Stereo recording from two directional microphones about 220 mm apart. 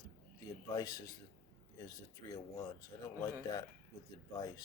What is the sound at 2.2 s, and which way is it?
Speech, 20° left (ahead or behind).